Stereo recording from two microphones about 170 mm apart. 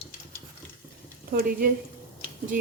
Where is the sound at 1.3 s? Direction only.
60° right (ahead or behind).